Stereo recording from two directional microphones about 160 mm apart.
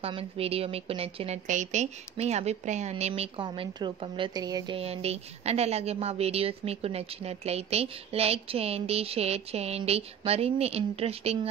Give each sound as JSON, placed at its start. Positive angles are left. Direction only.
{"t": 0.0, "sound": "a woman's voice", "side_deg": -35}
{"t": 4.7, "sound": "a woman's voice", "side_deg": -40}